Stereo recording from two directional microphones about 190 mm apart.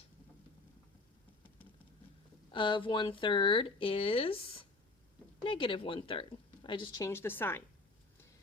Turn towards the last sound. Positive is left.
turn(degrees=10)  # may be behind; listen again after turning